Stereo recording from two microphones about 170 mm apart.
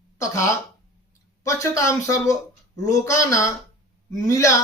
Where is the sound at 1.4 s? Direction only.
20° left (ahead or behind).